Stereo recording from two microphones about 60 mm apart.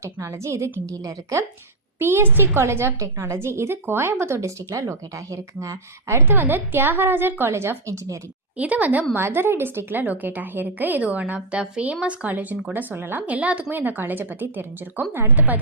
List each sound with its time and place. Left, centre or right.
0.0 s a woman's voice: right
2.0 s a woman's voice: right
6.2 s speech: right
8.5 s a woman's voice: right
9.1 s a woman's voice: right